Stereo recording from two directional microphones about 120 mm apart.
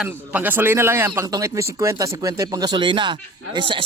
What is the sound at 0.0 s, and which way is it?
A man's voice, 15° right (ahead or behind).